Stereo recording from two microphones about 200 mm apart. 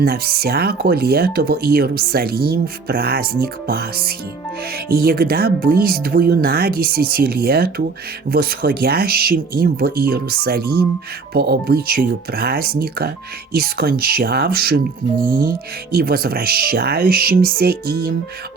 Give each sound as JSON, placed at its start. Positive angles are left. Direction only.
{"t": 0.0, "sound": "speech", "side_deg": -50}